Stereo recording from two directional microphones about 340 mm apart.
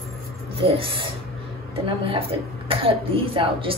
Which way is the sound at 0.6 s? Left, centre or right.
Centre.